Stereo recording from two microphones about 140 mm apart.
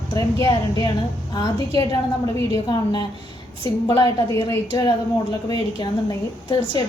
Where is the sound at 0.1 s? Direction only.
25° left (ahead or behind).